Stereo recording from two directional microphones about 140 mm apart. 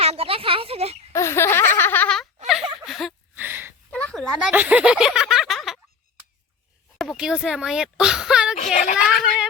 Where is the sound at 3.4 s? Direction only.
15° right (ahead or behind).